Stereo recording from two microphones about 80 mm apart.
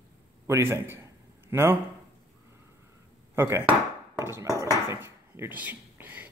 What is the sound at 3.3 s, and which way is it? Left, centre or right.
Dishes, right.